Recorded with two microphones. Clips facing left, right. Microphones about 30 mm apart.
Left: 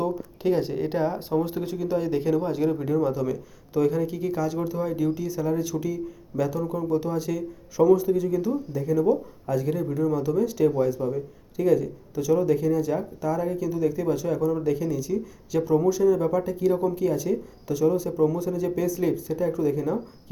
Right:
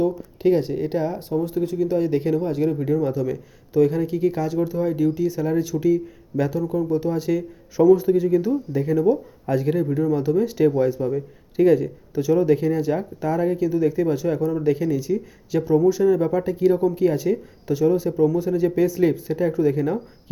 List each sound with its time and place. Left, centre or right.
0.0 s speech: centre
1.3 s speech: left
2.0 s a man's voice: centre; by 6.6 s right
6.7 s a man's voice: centre
7.1 s speech: right
8.8 s speech: right
11.5 s speech: right